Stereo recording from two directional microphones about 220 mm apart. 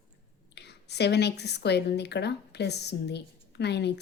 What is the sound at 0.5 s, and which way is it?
A woman's voice, 50° left (ahead or behind).